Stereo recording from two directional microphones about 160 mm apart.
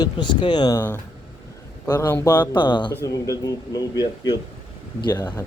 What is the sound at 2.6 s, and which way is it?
Speech, 30° left (ahead or behind).